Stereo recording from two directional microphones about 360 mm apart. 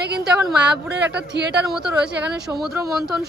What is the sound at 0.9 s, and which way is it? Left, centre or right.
Speech, right.